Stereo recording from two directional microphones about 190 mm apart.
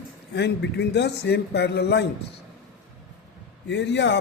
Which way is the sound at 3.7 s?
70° left (ahead or behind).